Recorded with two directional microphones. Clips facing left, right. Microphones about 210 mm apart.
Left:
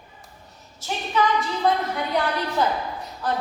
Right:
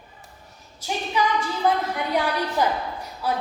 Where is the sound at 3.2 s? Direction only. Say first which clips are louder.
Even; 10° right (ahead or behind).